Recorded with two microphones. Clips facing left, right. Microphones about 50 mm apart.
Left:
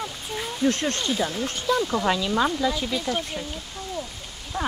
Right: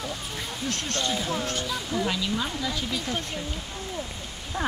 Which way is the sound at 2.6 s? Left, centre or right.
Centre.